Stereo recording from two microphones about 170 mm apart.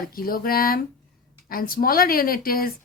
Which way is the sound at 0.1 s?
60° left (ahead or behind).